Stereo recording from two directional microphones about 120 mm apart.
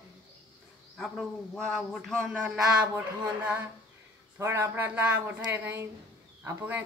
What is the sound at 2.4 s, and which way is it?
Speech, 10° right (ahead or behind).